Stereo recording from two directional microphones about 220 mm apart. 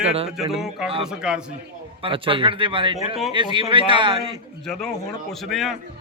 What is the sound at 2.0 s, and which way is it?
Speech, 25° right (ahead or behind).